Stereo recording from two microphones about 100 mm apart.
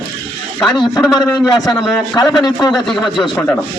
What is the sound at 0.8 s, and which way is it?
A man's voice, 40° left (ahead or behind).